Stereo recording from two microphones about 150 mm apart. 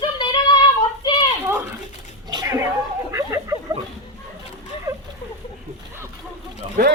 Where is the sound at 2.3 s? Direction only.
25° right (ahead or behind).